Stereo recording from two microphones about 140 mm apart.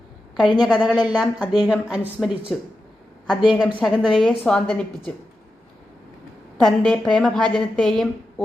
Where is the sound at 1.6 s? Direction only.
10° right (ahead or behind).